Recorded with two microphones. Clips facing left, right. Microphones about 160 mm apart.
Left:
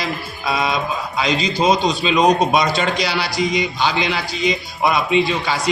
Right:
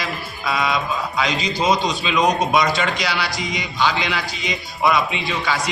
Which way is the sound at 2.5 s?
35° left (ahead or behind).